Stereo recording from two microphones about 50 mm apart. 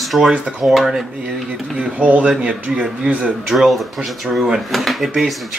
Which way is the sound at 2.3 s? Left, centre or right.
Centre.